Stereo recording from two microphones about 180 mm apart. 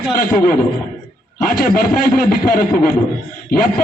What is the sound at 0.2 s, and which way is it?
A man's voice, 50° left (ahead or behind).